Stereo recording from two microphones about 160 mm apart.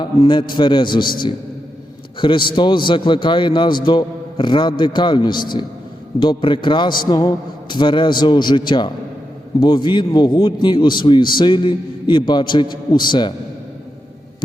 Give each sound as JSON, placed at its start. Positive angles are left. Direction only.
{"t": 0.0, "sound": "a man's voice", "side_deg": 30}
{"t": 2.1, "sound": "a man's voice", "side_deg": 30}